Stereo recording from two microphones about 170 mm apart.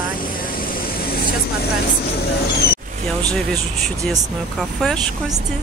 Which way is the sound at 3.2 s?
5° left (ahead or behind).